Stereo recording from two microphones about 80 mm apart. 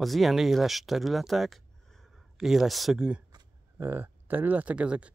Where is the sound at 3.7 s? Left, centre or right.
Right.